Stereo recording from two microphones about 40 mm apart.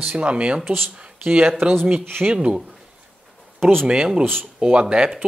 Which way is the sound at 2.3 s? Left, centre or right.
Right.